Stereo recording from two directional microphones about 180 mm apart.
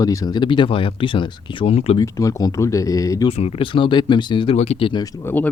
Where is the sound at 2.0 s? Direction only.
20° left (ahead or behind).